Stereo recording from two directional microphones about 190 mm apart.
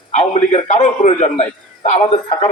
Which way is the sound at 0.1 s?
35° left (ahead or behind).